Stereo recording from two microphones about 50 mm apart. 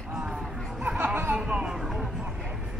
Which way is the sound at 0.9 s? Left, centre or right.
Right.